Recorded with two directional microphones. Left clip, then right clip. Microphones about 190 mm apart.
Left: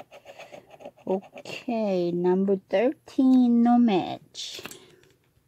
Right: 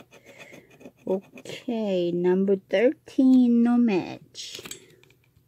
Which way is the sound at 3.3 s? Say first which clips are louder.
Even; 25° left (ahead or behind).